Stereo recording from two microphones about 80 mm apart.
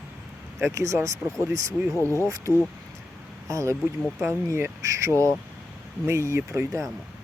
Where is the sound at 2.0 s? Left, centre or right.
Left.